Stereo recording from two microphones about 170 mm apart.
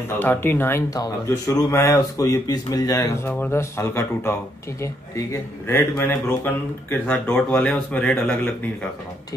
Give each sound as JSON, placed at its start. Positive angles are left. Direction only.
{"t": 0.2, "sound": "speech", "side_deg": 15}